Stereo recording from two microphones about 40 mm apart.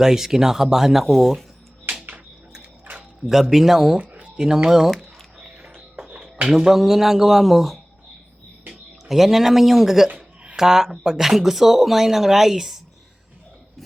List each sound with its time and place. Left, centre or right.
0.0 s speech: centre
1.0 s speech: centre
3.2 s speech: centre
3.9 s a sound: right
4.4 s speech: centre
5.6 s music: centre
6.6 s speech: centre
9.0 s speech: centre